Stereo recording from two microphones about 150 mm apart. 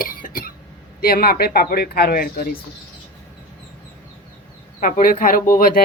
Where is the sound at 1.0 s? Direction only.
85° left.